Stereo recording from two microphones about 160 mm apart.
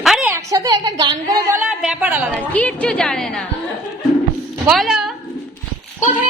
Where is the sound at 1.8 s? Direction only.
5° right (ahead or behind).